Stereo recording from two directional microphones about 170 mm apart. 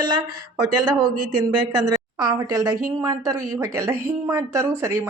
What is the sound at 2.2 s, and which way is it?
A woman's voice, 20° right (ahead or behind).